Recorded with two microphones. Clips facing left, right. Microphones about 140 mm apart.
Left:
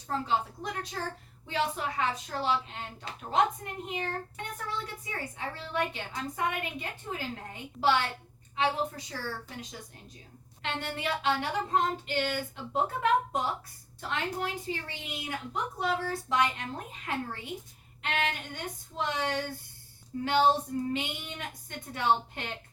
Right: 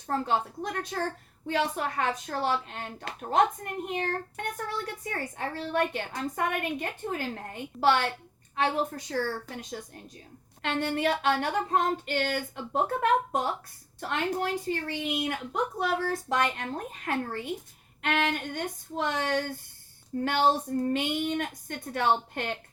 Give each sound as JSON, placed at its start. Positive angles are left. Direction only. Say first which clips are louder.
{"t": 0.1, "sound": "a woman's voice", "louder": "right 2 dB", "side_deg": -50}